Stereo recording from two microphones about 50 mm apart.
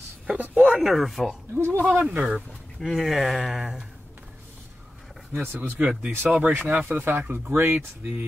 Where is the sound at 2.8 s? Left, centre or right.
Centre.